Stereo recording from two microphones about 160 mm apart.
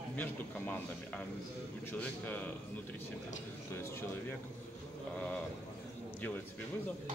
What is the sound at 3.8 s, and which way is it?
Speech, 15° left (ahead or behind).